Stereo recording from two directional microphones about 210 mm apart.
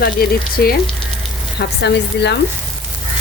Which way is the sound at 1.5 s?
55° left (ahead or behind).